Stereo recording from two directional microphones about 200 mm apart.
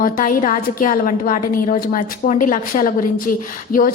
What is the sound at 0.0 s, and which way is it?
A woman's voice, 45° left (ahead or behind).